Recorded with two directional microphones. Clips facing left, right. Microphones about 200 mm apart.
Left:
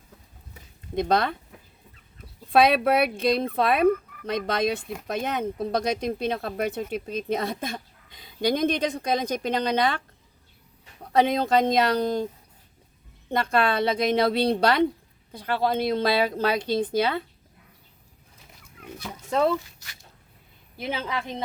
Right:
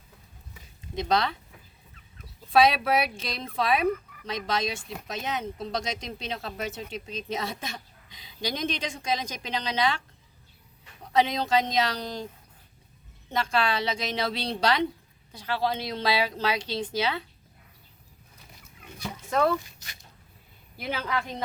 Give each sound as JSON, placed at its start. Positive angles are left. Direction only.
{"t": 0.9, "sound": "a woman's voice", "side_deg": 55}
{"t": 2.5, "sound": "speech", "side_deg": 55}
{"t": 11.1, "sound": "a woman's voice", "side_deg": 55}
{"t": 13.3, "sound": "a woman's voice", "side_deg": 55}
{"t": 19.3, "sound": "speech", "side_deg": 25}
{"t": 19.5, "sound": "speech", "side_deg": -20}
{"t": 20.7, "sound": "a woman's voice", "side_deg": 25}